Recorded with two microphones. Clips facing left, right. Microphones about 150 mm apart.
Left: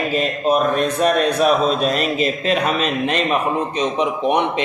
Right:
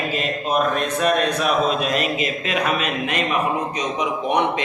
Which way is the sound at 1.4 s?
35° left (ahead or behind).